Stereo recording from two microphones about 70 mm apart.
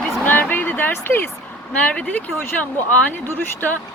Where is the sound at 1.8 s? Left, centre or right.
Centre.